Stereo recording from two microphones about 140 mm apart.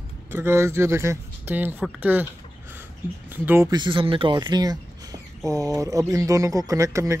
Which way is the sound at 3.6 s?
35° right (ahead or behind).